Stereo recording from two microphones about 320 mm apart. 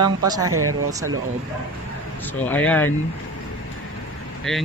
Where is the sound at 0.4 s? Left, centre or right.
Right.